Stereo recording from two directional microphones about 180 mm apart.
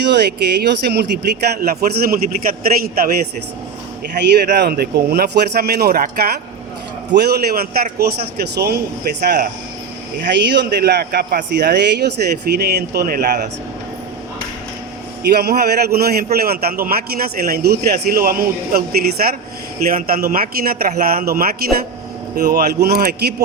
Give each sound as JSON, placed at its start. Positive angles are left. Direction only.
{"t": 0.0, "sound": "a man's voice", "side_deg": -70}
{"t": 4.3, "sound": "a man's voice", "side_deg": -65}
{"t": 10.2, "sound": "a man's voice", "side_deg": -70}
{"t": 15.2, "sound": "a man's voice", "side_deg": -60}